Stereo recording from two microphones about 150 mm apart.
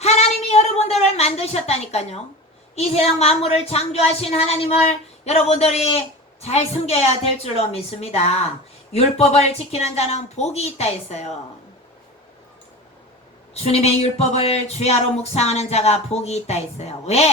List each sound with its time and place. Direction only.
0.0 s a sound: 45° left (ahead or behind)
2.7 s speech: 45° left (ahead or behind)
13.5 s speech: 45° left (ahead or behind)